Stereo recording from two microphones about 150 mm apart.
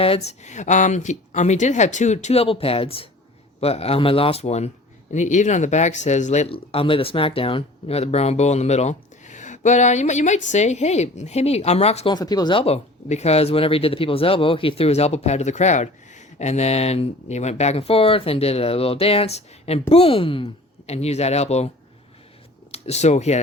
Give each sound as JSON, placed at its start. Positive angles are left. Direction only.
{"t": 0.3, "sound": "speech", "side_deg": 50}
{"t": 12.1, "sound": "speech", "side_deg": 25}
{"t": 22.7, "sound": "speech", "side_deg": 45}